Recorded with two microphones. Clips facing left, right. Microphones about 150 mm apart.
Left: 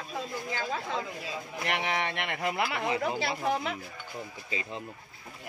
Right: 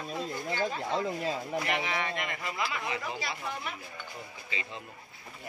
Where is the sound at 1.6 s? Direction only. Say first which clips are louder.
Left 1 dB; 60° left (ahead or behind).